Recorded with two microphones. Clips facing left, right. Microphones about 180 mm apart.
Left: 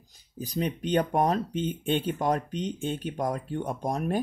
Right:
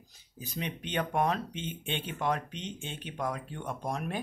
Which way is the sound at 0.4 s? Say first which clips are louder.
Left 8 dB; 40° left (ahead or behind).